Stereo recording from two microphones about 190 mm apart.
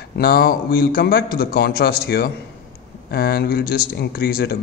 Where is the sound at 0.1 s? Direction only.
55° left (ahead or behind).